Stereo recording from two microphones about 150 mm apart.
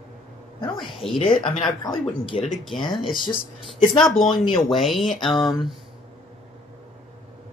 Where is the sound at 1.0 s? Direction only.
40° left (ahead or behind).